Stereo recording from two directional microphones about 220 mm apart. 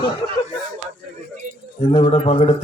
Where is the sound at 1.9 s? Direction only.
25° left (ahead or behind).